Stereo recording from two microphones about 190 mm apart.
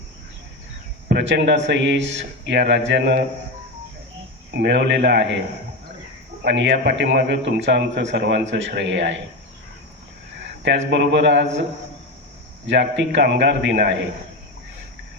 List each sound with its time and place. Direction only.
1.0 s a man's voice: 65° right (ahead or behind)
4.5 s speech: 60° right (ahead or behind)
6.4 s a man's voice: 65° right (ahead or behind)
10.4 s a sound: 65° right (ahead or behind)
10.9 s speech: 65° right (ahead or behind)
12.6 s a man's voice: 70° right (ahead or behind)